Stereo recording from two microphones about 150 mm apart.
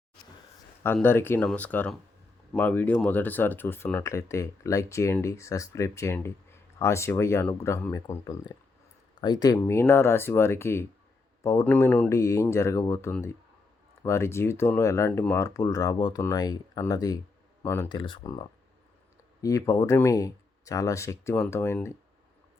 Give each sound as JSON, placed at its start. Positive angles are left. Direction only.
{"t": 1.0, "sound": "speech", "side_deg": 15}
{"t": 17.8, "sound": "speech", "side_deg": 30}